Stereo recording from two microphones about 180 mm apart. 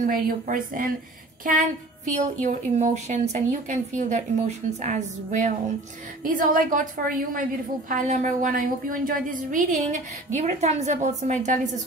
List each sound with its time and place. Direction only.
0.0 s a woman's voice: 50° right (ahead or behind)
2.0 s a woman's voice: 40° right (ahead or behind)